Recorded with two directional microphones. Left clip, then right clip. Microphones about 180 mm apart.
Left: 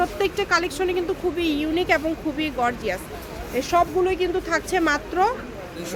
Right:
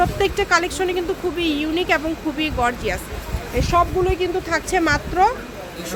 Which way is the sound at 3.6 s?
10° left (ahead or behind).